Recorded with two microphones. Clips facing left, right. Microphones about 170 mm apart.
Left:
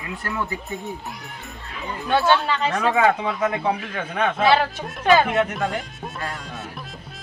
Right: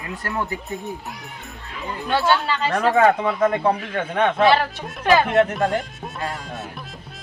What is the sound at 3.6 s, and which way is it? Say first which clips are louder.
Speech: right 3 dB; 55° right (ahead or behind).